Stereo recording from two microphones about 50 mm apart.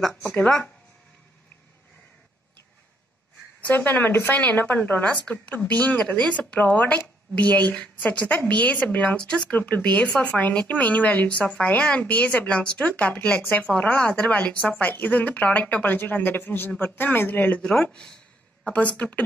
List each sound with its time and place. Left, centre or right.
3.6 s speech: left
9.5 s speech: left
17.6 s speech: centre
18.7 s speech: left